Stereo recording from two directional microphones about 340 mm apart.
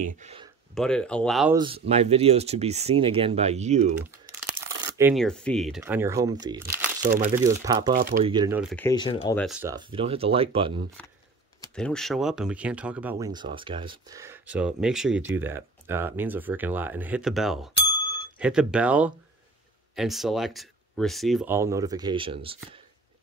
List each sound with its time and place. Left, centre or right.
0.2 s speech: centre
0.7 s speech: centre
1.6 s speech: centre
4.6 s speech: centre
7.9 s speech: right
8.3 s speech: centre
9.4 s speech: centre
11.0 s speech: centre
17.9 s bicycle bell: centre
18.4 s speech: centre